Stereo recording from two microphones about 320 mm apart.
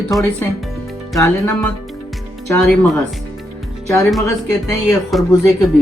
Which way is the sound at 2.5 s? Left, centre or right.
Centre.